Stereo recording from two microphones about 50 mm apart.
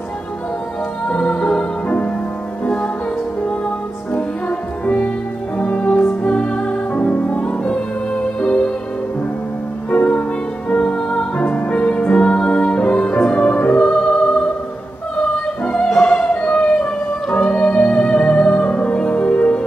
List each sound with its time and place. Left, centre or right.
1.0 s music: left
2.6 s music: left
4.1 s music: left
9.8 s music: left
15.6 s music: centre